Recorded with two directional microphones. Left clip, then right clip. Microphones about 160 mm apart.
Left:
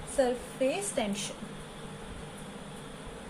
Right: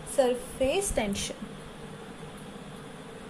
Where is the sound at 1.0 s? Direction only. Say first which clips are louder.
Right 2 dB; 40° right (ahead or behind).